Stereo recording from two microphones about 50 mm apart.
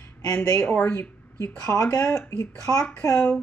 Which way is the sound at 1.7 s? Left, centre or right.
Left.